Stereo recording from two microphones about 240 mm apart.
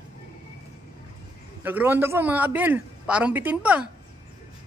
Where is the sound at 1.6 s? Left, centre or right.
Centre.